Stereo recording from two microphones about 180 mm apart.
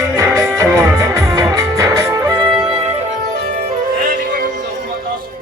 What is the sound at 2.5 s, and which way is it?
Music, 25° right (ahead or behind).